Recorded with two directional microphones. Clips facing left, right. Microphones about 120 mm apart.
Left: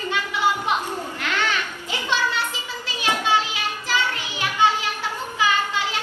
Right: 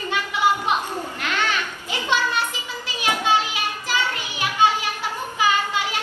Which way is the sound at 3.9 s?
15° right (ahead or behind).